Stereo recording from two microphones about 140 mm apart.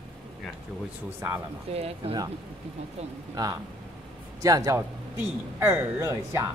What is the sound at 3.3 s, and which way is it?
A man's voice, 25° right (ahead or behind).